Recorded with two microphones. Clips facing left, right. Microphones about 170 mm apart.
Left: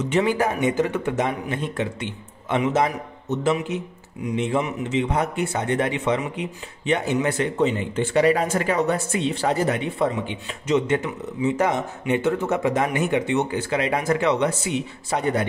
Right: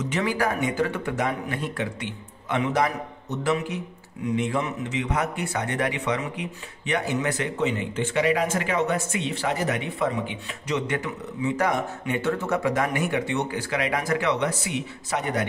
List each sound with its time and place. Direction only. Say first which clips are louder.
0.1 s speech: left 5 dB; 25° left (ahead or behind)